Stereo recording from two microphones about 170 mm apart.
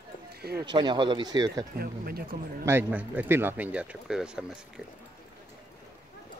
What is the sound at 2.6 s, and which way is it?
Speech, 10° right (ahead or behind).